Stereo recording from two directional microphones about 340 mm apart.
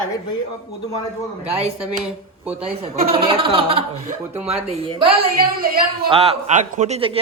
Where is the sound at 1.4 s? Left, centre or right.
Centre.